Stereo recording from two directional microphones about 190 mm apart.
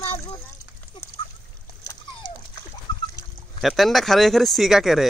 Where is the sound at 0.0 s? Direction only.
30° left (ahead or behind).